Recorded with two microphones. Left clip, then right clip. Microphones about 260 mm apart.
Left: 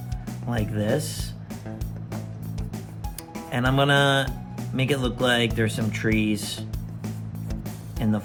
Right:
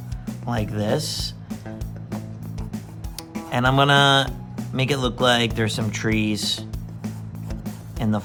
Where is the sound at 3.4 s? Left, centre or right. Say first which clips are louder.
Right 4 dB; centre.